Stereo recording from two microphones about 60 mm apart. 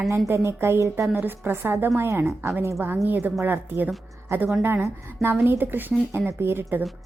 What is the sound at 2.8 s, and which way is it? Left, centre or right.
Speech, right.